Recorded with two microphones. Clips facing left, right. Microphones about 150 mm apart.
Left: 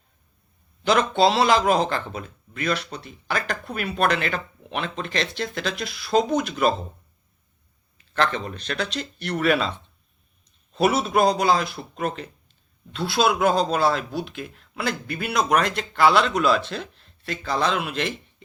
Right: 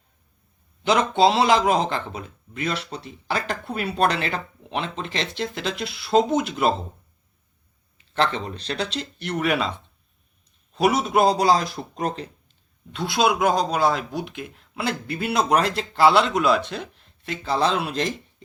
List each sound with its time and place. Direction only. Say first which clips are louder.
0.9 s speech: right 1 dB; 20° right (ahead or behind)
8.1 s speech: even; 25° right (ahead or behind)
10.8 s speech: right 1 dB; 15° right (ahead or behind); by 12.3 s 35° right (ahead or behind)
12.9 s speech: even; 15° right (ahead or behind); by 18.4 s 35° right (ahead or behind)